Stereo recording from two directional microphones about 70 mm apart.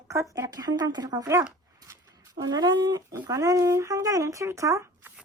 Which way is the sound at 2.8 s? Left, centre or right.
Right.